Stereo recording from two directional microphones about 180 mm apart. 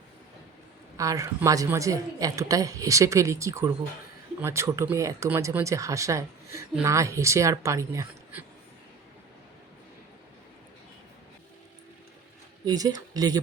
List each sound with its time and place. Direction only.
0.9 s a woman's voice: 20° right (ahead or behind)
12.6 s speech: 20° right (ahead or behind)